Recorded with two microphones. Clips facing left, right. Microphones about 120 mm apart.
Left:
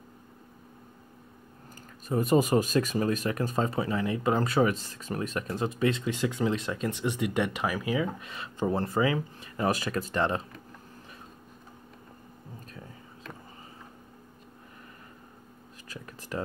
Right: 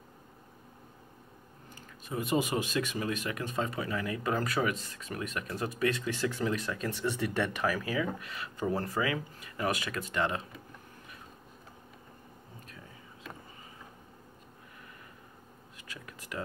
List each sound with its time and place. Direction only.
2.0 s speech: 40° left (ahead or behind)
15.9 s speech: 35° left (ahead or behind)